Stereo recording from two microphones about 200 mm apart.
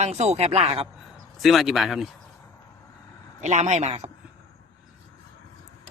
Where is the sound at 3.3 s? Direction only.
35° right (ahead or behind).